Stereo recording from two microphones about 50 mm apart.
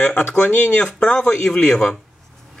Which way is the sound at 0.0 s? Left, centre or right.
Left.